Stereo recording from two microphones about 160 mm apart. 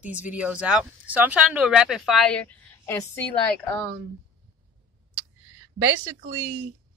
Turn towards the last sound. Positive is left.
turn(degrees=-15)  # may be behind; listen again after turning